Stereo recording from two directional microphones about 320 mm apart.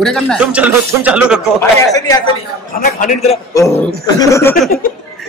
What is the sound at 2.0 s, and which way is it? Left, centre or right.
Speech, centre.